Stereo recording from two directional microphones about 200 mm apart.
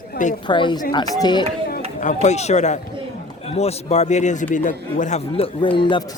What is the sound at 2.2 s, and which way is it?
Speech, 35° left (ahead or behind).